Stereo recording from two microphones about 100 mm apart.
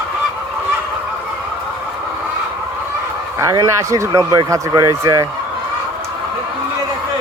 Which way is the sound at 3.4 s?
30° right (ahead or behind).